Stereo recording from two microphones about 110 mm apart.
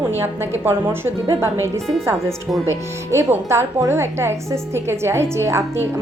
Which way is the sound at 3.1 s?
25° right (ahead or behind).